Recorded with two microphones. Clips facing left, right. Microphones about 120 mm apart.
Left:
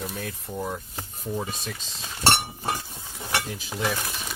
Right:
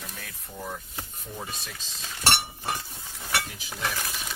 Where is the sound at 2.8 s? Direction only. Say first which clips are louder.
Left 3 dB; 20° left (ahead or behind).